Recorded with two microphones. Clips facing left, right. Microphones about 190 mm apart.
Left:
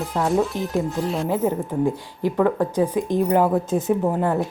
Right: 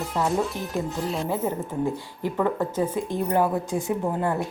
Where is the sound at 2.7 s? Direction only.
15° left (ahead or behind).